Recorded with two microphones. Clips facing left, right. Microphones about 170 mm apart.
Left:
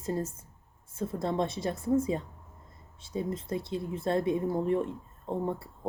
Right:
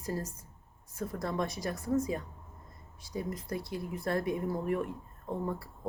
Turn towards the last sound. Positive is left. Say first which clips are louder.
# left 3 dB
turn(degrees=25)  # may be behind; listen again after turning